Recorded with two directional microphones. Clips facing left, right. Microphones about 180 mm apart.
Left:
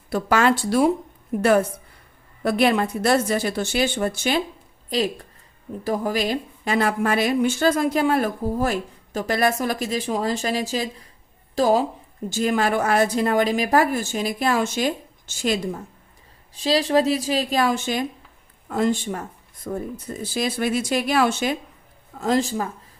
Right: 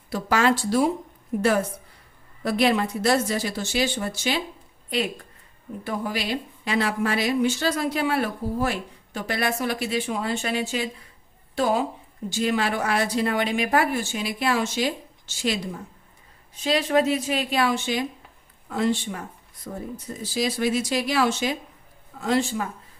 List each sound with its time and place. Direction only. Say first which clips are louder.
0.1 s speech: left 2 dB; 55° left (ahead or behind)
2.4 s speech: left 2 dB; 55° left (ahead or behind)
4.9 s a woman's voice: left 3 dB; 35° left (ahead or behind)
16.6 s a woman's voice: left 2 dB; 35° left (ahead or behind); by 21.5 s 55° left (ahead or behind)
22.2 s a woman's voice: left 2 dB; 40° left (ahead or behind)